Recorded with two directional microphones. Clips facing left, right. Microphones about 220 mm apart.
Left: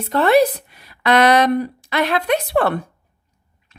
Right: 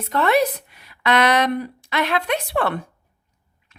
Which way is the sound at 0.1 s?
35° left (ahead or behind).